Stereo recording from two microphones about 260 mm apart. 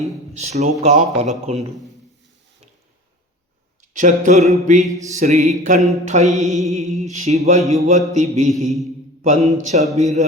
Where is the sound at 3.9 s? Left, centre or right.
Right.